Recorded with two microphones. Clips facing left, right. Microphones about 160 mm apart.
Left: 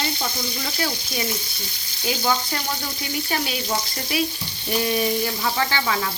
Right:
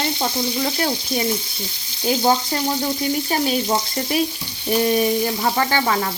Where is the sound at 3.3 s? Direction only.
35° right (ahead or behind).